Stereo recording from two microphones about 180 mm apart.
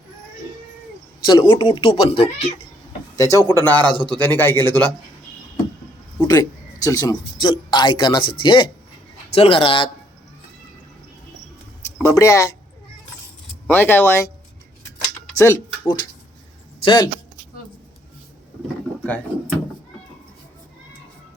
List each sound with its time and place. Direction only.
1.2 s speech: 25° left (ahead or behind)
3.2 s speech: 15° left (ahead or behind)
6.1 s a man's voice: 20° left (ahead or behind)
12.0 s speech: 15° left (ahead or behind)
13.7 s speech: 10° left (ahead or behind)
15.4 s speech: 20° left (ahead or behind)